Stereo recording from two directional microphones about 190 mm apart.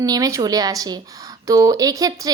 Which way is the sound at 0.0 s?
20° right (ahead or behind).